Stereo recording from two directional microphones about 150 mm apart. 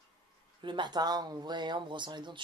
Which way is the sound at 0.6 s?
30° right (ahead or behind).